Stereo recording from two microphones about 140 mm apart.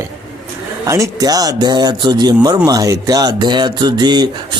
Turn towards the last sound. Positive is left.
turn(degrees=-30)  # may be behind; listen again after turning